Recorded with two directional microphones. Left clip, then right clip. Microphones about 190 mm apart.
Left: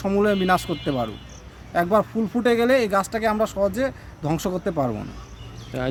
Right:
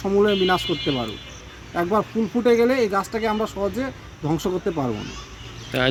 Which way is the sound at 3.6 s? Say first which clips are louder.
Left 3 dB; 30° left (ahead or behind).